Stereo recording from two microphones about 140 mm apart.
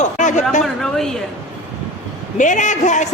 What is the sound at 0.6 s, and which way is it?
Speech, 5° left (ahead or behind).